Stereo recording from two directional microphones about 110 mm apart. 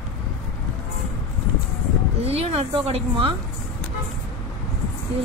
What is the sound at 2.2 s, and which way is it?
Speech, 65° right (ahead or behind).